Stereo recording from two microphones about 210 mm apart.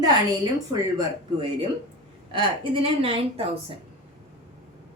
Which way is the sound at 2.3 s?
25° right (ahead or behind).